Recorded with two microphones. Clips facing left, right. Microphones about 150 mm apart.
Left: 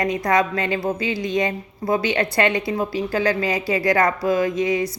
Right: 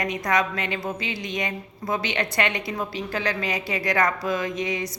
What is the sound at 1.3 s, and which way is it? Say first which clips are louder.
A woman's voice: left 7 dB; 30° left (ahead or behind).